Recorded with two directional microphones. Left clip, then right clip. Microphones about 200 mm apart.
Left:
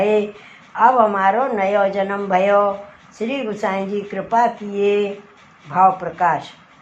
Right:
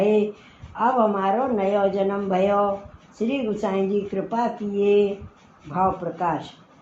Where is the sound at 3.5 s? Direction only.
20° left (ahead or behind).